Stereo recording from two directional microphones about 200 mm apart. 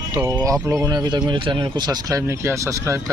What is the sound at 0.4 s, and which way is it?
Speech, 15° right (ahead or behind).